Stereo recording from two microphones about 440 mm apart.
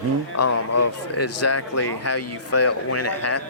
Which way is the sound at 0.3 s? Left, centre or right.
Left.